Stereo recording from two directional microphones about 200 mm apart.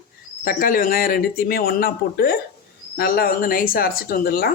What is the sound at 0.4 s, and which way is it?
Speech, 45° left (ahead or behind).